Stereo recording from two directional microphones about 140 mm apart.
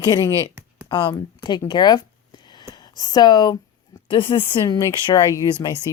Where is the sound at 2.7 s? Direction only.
30° left (ahead or behind).